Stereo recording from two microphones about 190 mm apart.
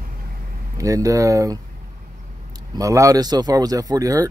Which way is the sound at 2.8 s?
15° right (ahead or behind).